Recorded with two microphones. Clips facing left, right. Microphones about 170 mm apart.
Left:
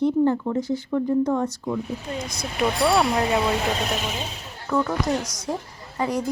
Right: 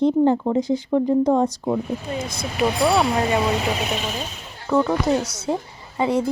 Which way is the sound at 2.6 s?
5° right (ahead or behind).